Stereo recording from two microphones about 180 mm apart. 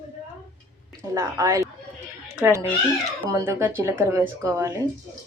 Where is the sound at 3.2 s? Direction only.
15° right (ahead or behind).